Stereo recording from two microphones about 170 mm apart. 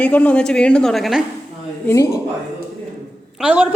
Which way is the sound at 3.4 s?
5° right (ahead or behind).